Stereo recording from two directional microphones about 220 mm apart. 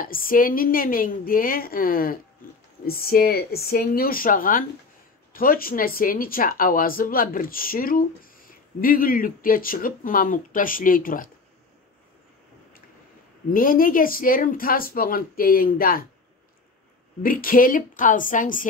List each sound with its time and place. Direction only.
0.0 s a woman's voice: 40° left (ahead or behind)
13.5 s a woman's voice: 40° left (ahead or behind)
17.2 s a woman's voice: 40° left (ahead or behind)